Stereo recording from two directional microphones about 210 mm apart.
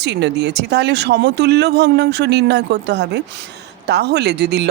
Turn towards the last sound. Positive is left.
turn(degrees=-50)  # may be behind; listen again after turning